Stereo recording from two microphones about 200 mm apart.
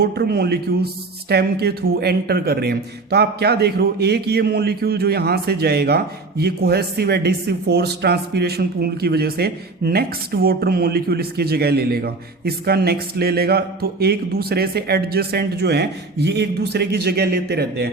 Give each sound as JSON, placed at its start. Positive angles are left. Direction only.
{"t": 0.0, "sound": "a man's voice", "side_deg": -55}